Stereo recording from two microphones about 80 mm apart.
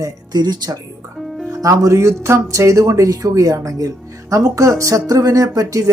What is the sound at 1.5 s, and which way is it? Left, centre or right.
Speech, right.